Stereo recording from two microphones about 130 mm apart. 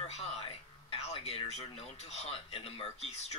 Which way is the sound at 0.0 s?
50° left (ahead or behind).